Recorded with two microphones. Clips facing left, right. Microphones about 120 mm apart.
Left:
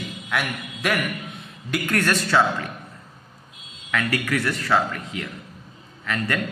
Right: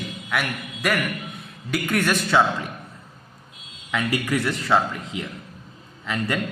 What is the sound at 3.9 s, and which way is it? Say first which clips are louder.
A man's voice: right 1 dB; 20° right (ahead or behind).